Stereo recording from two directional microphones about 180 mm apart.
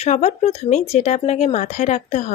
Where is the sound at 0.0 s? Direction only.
40° left (ahead or behind).